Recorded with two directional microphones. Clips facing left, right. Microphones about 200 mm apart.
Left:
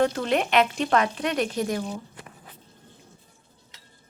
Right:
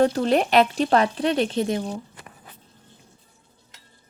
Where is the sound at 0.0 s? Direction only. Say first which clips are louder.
Right 4 dB; 35° right (ahead or behind).